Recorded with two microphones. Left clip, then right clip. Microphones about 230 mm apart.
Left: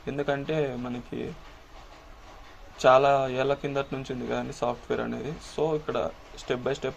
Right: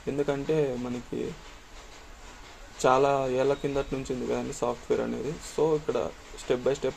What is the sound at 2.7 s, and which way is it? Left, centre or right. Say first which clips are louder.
Speech: left 3 dB; centre.